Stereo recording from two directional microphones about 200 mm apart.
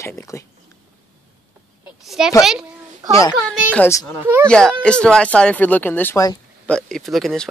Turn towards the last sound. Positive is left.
turn(degrees=0)  # may be behind; listen again after turning